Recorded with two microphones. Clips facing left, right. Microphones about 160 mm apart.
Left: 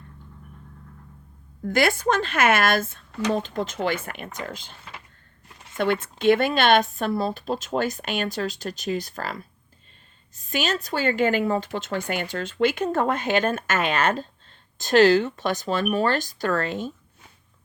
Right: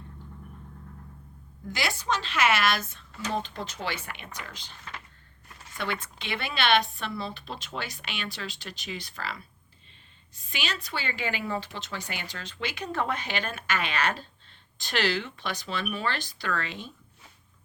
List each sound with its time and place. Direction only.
1.6 s speech: 55° left (ahead or behind)
3.3 s speech: 45° left (ahead or behind)
5.7 s speech: 50° left (ahead or behind)